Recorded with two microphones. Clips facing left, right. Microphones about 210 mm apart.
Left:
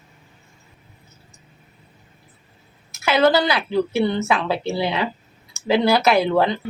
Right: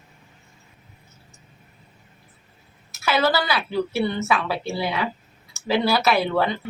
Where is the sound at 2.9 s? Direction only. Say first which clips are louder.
Left 5 dB; 20° left (ahead or behind).